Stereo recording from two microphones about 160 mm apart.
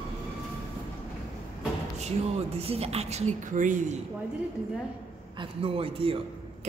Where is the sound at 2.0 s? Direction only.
40° right (ahead or behind).